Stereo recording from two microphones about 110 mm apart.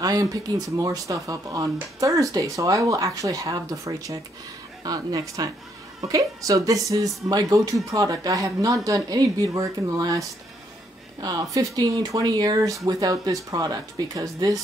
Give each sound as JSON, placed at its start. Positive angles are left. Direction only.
{"t": 0.0, "sound": "speech", "side_deg": -35}